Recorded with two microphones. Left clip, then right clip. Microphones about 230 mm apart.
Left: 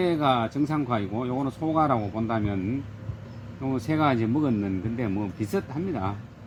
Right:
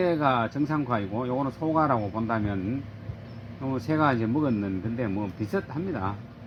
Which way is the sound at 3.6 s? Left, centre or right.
Centre.